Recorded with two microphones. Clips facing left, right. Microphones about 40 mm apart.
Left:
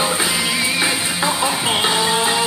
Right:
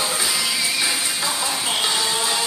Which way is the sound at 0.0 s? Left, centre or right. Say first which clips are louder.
Left 4 dB; left.